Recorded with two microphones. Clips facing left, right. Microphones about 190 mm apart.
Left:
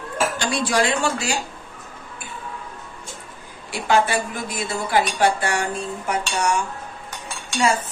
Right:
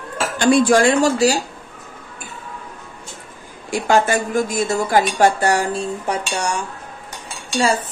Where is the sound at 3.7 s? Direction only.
45° right (ahead or behind).